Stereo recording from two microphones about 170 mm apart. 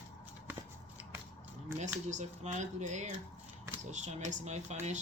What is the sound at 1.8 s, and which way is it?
Speech, 45° right (ahead or behind).